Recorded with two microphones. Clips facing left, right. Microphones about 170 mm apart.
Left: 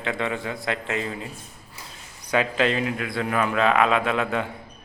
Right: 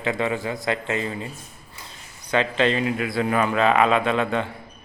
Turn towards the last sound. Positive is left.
turn(degrees=5)  # may be behind; listen again after turning